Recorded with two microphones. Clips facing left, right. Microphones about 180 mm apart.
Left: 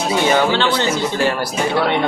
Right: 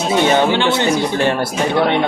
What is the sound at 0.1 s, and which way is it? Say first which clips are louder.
Speech: right 2 dB; 20° right (ahead or behind).